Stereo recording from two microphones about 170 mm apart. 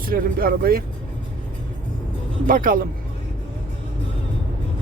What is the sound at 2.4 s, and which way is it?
Speech, 50° right (ahead or behind).